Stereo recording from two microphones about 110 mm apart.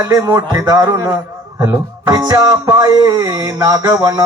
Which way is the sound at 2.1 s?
35° right (ahead or behind).